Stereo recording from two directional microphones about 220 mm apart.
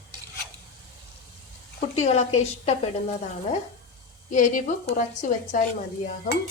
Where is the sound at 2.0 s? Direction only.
30° left (ahead or behind).